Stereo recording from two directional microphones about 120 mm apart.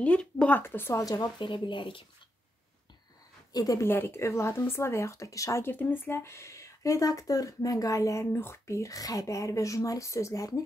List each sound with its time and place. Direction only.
0.0 s speech: 10° left (ahead or behind); by 2.0 s 45° left (ahead or behind)
3.5 s speech: 30° left (ahead or behind)